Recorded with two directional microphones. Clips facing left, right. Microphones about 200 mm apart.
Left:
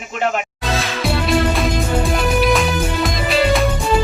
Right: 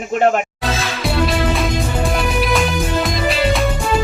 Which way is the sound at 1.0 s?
Centre (ahead or behind).